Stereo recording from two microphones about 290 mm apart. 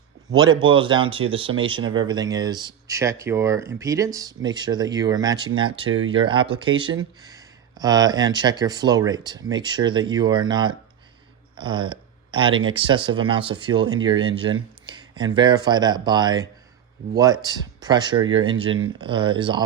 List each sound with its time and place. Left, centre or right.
0.6 s speech: centre
11.5 s a sound: centre
12.6 s speech: centre